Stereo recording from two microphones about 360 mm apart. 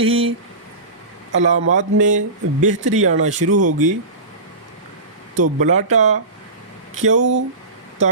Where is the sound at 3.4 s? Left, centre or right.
Right.